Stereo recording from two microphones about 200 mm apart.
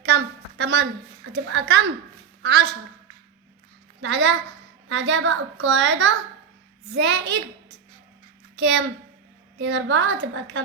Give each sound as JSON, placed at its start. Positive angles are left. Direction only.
{"t": 0.0, "sound": "a sound", "side_deg": -60}
{"t": 2.4, "sound": "a woman's voice", "side_deg": -55}
{"t": 4.0, "sound": "a woman's voice", "side_deg": -65}
{"t": 8.5, "sound": "a woman's voice", "side_deg": -65}